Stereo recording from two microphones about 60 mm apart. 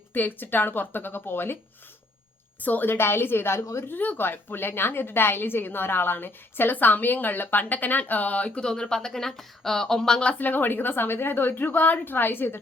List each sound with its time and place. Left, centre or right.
0.1 s a woman's voice: left
2.6 s a woman's voice: left
3.6 s a woman's voice: left
3.8 s a woman's voice: left
10.4 s a woman's voice: left